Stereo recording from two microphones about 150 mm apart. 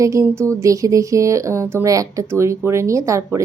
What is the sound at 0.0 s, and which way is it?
Speech, 20° right (ahead or behind).